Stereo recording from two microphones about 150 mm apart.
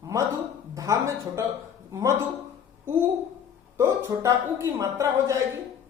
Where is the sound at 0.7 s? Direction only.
20° right (ahead or behind).